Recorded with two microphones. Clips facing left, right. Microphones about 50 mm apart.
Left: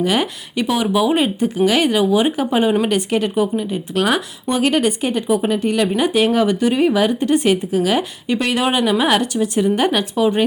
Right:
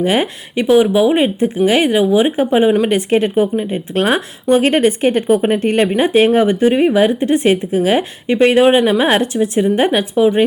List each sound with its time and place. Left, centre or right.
0.0 s speech: right